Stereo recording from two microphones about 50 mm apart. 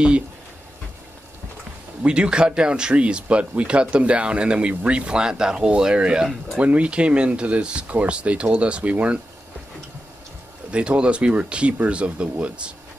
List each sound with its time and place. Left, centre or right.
2.0 s speech: centre
10.7 s speech: right